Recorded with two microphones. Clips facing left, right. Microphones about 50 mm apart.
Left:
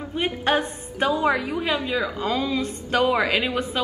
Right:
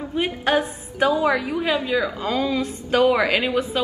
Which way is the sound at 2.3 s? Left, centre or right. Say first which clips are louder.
Right 3 dB; right.